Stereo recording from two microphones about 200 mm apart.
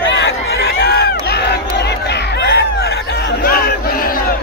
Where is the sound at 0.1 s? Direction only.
60° left (ahead or behind).